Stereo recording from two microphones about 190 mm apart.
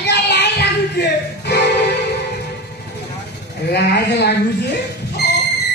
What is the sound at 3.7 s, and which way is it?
A man's voice, 60° left (ahead or behind).